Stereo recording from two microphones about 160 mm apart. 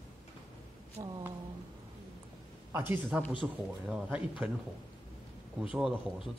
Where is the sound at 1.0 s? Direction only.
25° right (ahead or behind).